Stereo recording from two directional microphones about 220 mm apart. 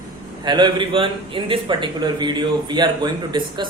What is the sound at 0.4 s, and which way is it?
A man's voice, 20° right (ahead or behind).